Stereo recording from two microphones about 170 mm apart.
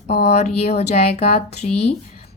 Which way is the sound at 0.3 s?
40° left (ahead or behind).